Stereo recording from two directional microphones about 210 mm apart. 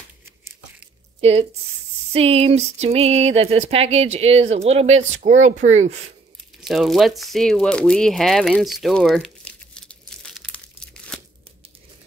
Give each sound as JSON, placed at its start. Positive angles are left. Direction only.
{"t": 0.2, "sound": "crumpling", "side_deg": -10}
{"t": 1.2, "sound": "speech", "side_deg": -30}
{"t": 6.6, "sound": "speech", "side_deg": 0}
{"t": 11.1, "sound": "tearing", "side_deg": 5}